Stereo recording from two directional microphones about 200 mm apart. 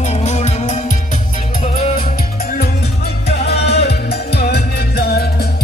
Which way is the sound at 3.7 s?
55° left (ahead or behind).